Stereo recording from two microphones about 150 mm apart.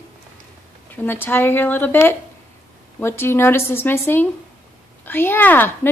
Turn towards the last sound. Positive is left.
turn(degrees=10)  # may be behind; listen again after turning